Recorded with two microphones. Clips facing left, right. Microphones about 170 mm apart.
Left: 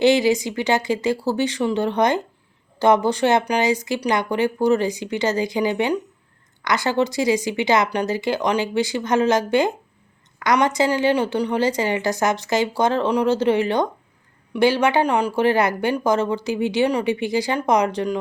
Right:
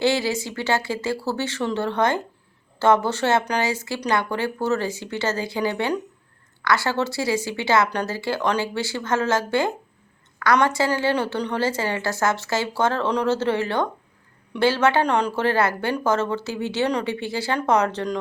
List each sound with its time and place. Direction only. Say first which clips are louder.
0.0 s speech: left 6 dB; 15° left (ahead or behind)